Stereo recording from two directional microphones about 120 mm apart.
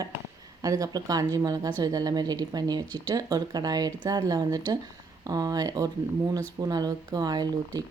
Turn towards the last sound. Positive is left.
turn(degrees=-35)  # may be behind; listen again after turning